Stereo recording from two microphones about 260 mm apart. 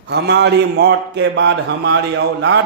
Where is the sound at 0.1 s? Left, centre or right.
Right.